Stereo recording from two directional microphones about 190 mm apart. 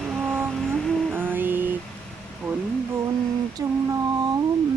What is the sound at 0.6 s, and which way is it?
Vehicle, centre (ahead or behind).